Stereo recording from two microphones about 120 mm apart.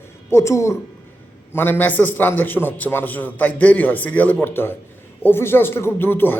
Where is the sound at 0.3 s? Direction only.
25° left (ahead or behind).